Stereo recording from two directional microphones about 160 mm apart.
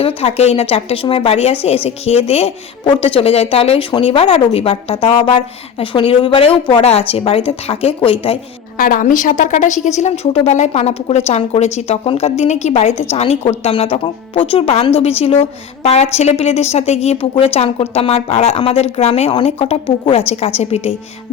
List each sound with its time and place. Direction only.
0.0 s a woman's voice: 40° left (ahead or behind)
8.8 s a woman's voice: 60° left (ahead or behind); by 20.9 s 40° left (ahead or behind)